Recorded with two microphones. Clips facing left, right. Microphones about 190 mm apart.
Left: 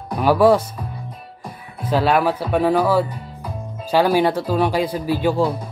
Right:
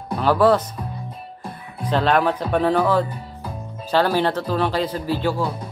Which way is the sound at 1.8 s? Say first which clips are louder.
Left 1 dB; 5° left (ahead or behind).